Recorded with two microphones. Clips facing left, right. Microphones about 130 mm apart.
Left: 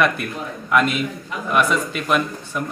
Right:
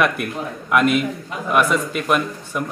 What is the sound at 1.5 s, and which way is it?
A man's voice, 5° right (ahead or behind).